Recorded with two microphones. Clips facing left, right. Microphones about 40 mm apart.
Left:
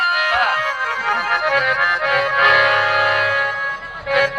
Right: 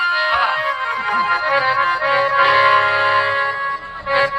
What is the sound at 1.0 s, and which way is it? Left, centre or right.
Music, left.